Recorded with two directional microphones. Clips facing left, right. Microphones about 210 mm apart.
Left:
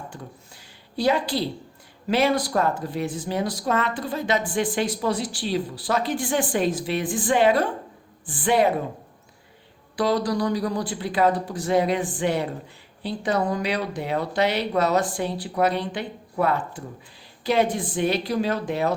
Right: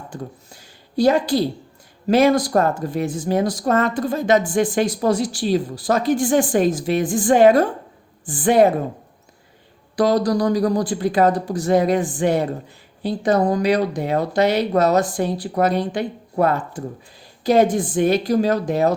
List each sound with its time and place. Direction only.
0.1 s speech: 45° right (ahead or behind)
9.9 s speech: 45° right (ahead or behind)